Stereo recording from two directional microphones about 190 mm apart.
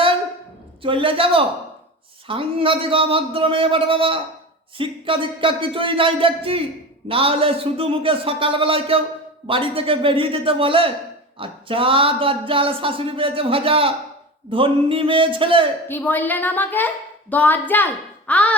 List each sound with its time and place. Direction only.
0.8 s speech: 30° right (ahead or behind)
15.9 s speech: 10° left (ahead or behind)